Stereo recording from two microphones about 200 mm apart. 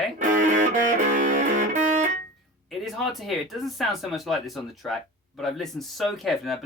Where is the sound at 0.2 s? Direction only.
40° right (ahead or behind).